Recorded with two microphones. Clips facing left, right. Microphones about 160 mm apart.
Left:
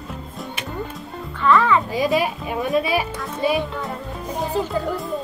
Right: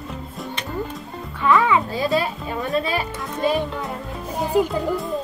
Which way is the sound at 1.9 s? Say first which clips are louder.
Left 2 dB; 15° left (ahead or behind).